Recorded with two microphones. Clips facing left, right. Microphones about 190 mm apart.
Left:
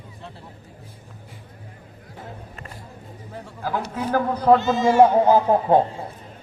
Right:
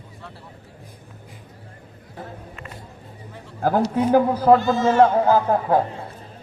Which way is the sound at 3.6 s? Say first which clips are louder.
Right 7 dB; 50° right (ahead or behind).